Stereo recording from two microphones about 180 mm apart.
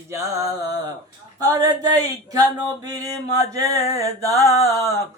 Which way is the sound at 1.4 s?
20° right (ahead or behind).